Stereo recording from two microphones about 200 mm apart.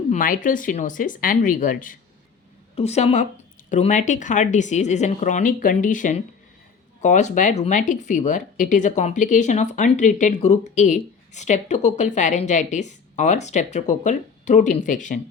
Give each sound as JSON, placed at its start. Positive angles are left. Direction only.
{"t": 0.1, "sound": "speech", "side_deg": 40}